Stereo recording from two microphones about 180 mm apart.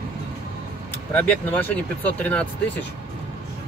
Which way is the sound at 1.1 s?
10° left (ahead or behind).